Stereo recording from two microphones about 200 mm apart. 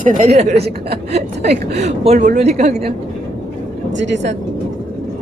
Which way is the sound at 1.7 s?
35° right (ahead or behind).